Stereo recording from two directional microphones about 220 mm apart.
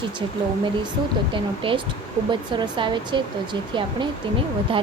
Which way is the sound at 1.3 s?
25° right (ahead or behind).